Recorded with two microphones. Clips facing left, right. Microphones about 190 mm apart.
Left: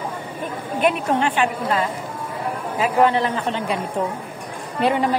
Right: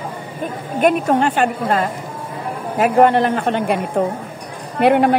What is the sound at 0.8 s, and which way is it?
A woman's voice, 40° right (ahead or behind).